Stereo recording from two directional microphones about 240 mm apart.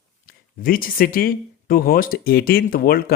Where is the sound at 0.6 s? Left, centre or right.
Left.